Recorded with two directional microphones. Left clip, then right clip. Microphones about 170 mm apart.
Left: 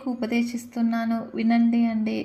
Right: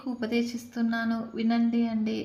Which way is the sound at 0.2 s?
10° left (ahead or behind).